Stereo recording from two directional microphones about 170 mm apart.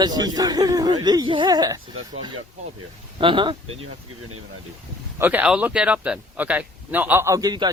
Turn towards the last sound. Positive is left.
turn(degrees=-25)  # may be behind; listen again after turning